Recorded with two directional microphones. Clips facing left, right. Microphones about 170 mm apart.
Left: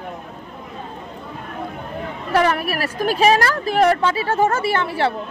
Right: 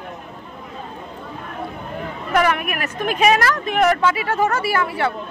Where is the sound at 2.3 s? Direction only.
30° left (ahead or behind).